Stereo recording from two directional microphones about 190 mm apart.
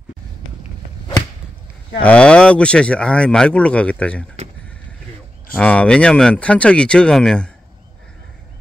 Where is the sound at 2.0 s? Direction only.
5° left (ahead or behind).